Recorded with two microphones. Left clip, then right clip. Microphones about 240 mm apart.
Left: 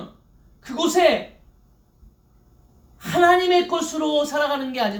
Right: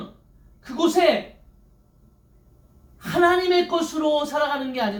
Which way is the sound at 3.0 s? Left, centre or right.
Left.